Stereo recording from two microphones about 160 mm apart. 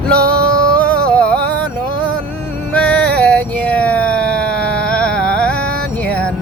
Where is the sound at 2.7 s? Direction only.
5° left (ahead or behind).